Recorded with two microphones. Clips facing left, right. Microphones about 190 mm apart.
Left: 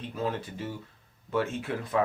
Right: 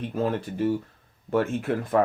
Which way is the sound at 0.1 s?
50° right (ahead or behind).